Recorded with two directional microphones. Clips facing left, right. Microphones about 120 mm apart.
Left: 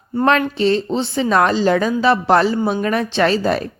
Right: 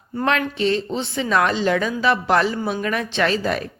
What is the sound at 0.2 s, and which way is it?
A woman's voice, 35° left (ahead or behind).